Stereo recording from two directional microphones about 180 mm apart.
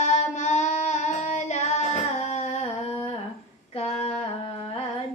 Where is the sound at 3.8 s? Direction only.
35° left (ahead or behind).